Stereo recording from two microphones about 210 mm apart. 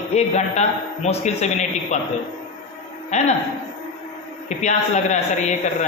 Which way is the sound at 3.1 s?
35° left (ahead or behind).